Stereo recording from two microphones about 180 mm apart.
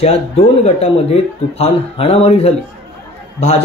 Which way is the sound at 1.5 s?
35° left (ahead or behind).